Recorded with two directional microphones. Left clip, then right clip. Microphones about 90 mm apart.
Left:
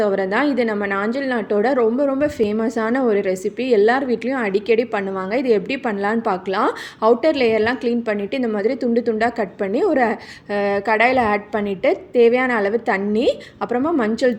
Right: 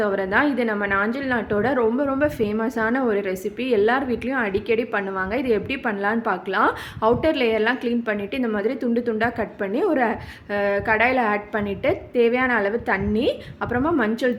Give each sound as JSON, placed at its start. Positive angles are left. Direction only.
{"t": 0.0, "sound": "a woman's voice", "side_deg": 25}
{"t": 2.4, "sound": "a woman's voice", "side_deg": 35}